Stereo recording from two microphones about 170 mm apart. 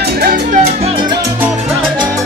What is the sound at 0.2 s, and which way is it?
Music, 60° right (ahead or behind).